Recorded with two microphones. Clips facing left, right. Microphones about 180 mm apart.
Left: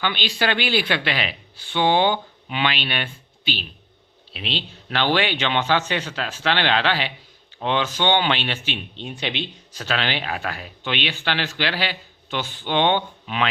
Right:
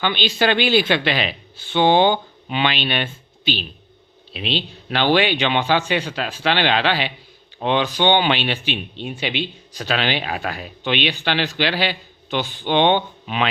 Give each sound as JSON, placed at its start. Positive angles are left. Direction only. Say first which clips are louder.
{"t": 0.0, "sound": "speech", "louder": "right 4 dB", "side_deg": -25}